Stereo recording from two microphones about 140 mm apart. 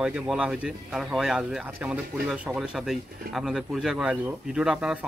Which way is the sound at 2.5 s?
Centre (ahead or behind).